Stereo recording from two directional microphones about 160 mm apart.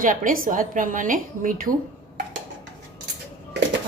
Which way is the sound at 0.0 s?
55° right (ahead or behind).